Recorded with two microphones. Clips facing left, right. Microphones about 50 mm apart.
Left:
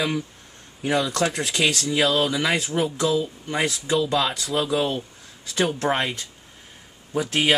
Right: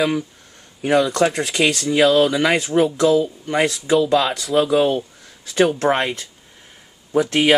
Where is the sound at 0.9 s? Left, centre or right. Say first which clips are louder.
Right 7 dB; centre.